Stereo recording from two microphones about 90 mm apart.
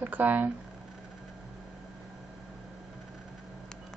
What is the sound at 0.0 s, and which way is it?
Speech, 20° right (ahead or behind).